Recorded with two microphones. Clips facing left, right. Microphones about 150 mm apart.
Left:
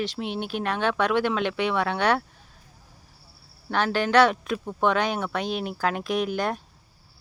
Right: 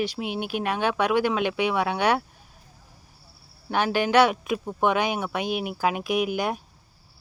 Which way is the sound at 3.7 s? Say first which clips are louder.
Right 1 dB; 15° right (ahead or behind).